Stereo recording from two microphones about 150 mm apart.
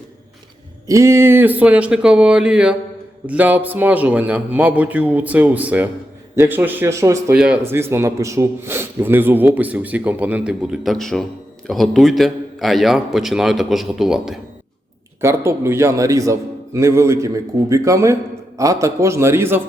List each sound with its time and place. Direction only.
0.9 s a man's voice: 20° right (ahead or behind)
7.3 s a man's voice: 10° right (ahead or behind)
15.2 s a man's voice: 15° right (ahead or behind)